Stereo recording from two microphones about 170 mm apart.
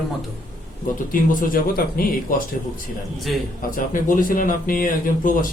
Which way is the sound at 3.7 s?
55° left (ahead or behind).